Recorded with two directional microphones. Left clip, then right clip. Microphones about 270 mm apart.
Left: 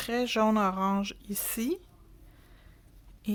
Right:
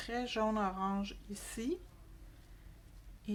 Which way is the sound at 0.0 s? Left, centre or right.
Left.